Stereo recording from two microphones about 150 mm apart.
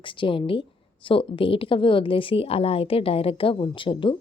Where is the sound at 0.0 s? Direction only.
35° left (ahead or behind).